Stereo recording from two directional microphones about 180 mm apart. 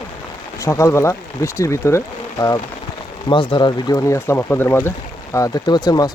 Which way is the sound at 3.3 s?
25° left (ahead or behind).